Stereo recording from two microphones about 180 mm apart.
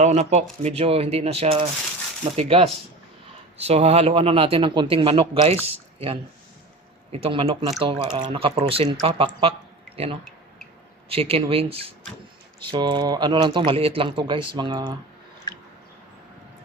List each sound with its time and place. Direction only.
0.0 s a man's voice: 40° right (ahead or behind)
7.1 s a man's voice: 30° right (ahead or behind)
15.5 s a sound: 25° left (ahead or behind)